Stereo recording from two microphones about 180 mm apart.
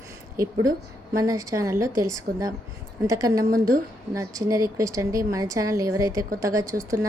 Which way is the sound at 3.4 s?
50° right (ahead or behind).